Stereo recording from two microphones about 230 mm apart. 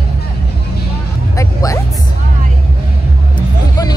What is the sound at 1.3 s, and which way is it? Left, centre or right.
Vehicle, centre.